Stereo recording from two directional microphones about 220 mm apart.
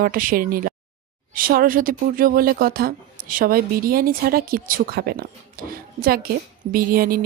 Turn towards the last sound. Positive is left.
turn(degrees=-40)  # may be behind; listen again after turning